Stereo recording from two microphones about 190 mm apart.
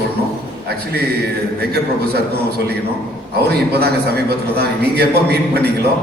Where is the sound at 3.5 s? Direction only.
60° right (ahead or behind).